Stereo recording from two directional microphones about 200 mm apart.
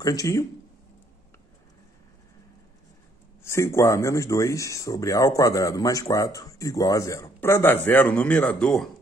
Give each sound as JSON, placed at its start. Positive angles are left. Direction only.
{"t": 0.0, "sound": "speech", "side_deg": 15}
{"t": 3.4, "sound": "speech", "side_deg": 15}